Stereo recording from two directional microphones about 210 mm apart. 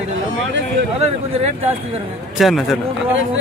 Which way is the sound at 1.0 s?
30° right (ahead or behind).